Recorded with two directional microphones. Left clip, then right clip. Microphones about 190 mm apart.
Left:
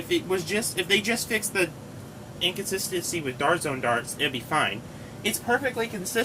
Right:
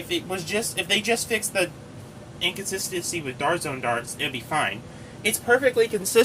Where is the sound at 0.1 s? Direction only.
15° right (ahead or behind).